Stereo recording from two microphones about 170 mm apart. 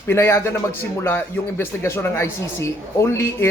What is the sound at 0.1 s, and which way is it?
Speech, 15° left (ahead or behind).